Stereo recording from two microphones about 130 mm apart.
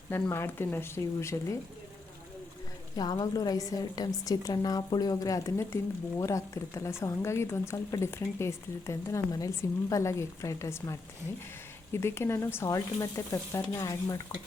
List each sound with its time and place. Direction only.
0.1 s speech: 20° left (ahead or behind)
2.9 s a woman's voice: 30° left (ahead or behind)